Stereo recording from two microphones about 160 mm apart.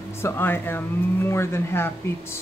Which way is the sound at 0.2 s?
15° left (ahead or behind).